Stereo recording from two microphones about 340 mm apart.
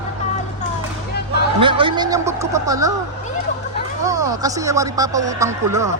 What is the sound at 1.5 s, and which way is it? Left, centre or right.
Speech, centre.